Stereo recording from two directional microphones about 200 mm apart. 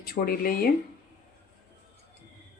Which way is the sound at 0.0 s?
45° left (ahead or behind).